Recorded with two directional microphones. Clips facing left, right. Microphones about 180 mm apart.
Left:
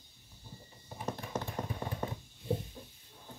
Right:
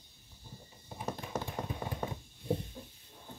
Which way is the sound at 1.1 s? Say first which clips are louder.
Even; 10° right (ahead or behind).